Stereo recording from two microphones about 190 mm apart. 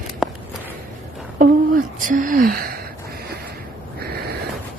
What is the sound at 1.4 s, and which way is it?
A woman's voice, 45° right (ahead or behind).